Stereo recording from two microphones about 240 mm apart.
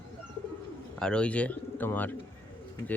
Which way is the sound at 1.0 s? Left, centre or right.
Centre.